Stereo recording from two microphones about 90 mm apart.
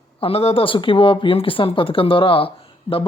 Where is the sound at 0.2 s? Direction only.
90° left.